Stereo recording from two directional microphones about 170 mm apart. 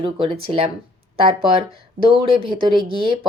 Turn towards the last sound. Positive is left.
turn(degrees=-30)  # may be behind; listen again after turning